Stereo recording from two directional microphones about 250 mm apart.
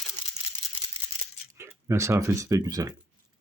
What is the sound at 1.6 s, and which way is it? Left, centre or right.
Speech, centre.